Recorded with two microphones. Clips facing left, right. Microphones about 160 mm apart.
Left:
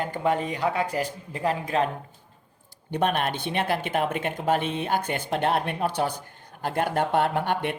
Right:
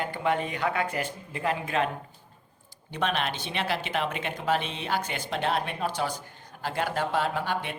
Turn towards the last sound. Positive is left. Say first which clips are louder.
# left 4 dB
turn(degrees=60)  # may be behind; listen again after turning